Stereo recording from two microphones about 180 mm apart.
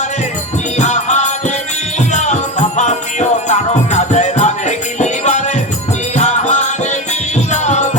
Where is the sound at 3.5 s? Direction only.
40° left (ahead or behind).